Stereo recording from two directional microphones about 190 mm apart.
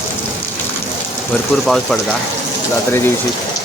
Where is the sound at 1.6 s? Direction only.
Centre (ahead or behind).